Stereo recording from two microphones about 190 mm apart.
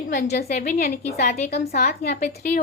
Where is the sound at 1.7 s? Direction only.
55° left (ahead or behind).